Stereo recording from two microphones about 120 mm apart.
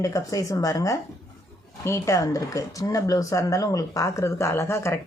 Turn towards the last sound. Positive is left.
turn(degrees=25)  # may be behind; listen again after turning